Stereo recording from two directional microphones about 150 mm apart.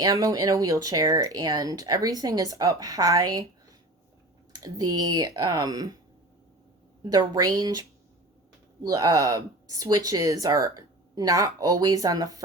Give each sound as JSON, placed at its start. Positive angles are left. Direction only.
{"t": 0.0, "sound": "speech", "side_deg": -25}
{"t": 7.0, "sound": "speech", "side_deg": -30}